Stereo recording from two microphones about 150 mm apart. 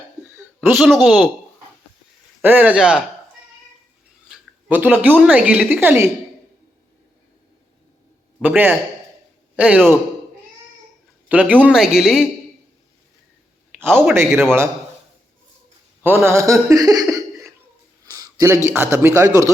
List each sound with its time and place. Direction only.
0.6 s speech: centre (ahead or behind)
2.4 s a woman's voice: 10° right (ahead or behind)
4.3 s a sound: 10° right (ahead or behind)
5.2 s a woman's voice: 10° right (ahead or behind)
8.4 s a woman's voice: 10° right (ahead or behind)
11.3 s speech: 10° right (ahead or behind)
13.7 s a man's voice: 15° right (ahead or behind)
16.0 s speech: 15° right (ahead or behind)
18.0 s a sound: 25° right (ahead or behind)
18.8 s speech: 15° right (ahead or behind)